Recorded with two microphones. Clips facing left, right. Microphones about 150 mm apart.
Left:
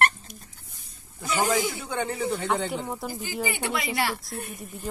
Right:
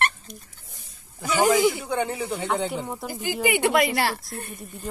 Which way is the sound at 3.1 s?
75° right (ahead or behind).